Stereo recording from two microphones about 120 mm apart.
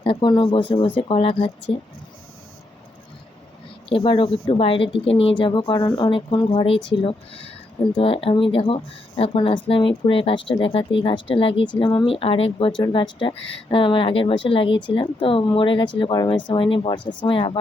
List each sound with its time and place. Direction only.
0.0 s speech: 40° left (ahead or behind)
3.8 s speech: 45° left (ahead or behind)